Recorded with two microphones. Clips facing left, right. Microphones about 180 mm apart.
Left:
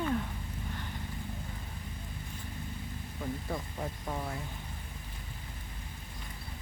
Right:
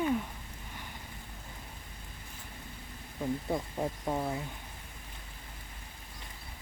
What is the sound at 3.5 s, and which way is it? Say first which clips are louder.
Speech: right 4 dB; 25° right (ahead or behind).